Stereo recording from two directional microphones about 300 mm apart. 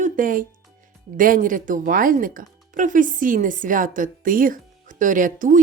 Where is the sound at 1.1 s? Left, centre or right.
Right.